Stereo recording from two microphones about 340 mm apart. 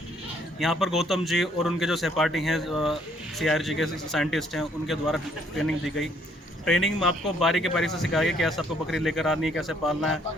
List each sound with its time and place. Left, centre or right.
0.6 s speech: centre